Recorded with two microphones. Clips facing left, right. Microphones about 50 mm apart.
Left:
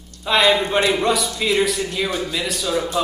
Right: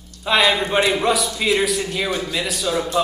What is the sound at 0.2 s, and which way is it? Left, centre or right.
A man's voice, centre.